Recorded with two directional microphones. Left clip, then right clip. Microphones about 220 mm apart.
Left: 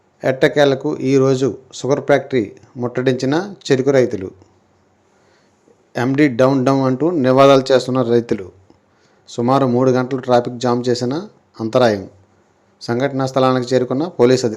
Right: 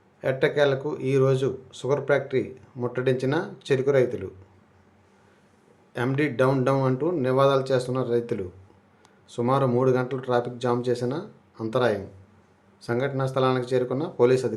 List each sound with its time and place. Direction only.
0.2 s speech: 25° left (ahead or behind)
5.9 s speech: 25° left (ahead or behind)
7.2 s a man's voice: 35° left (ahead or behind)
11.2 s a sound: 10° left (ahead or behind)
11.7 s speech: 30° left (ahead or behind)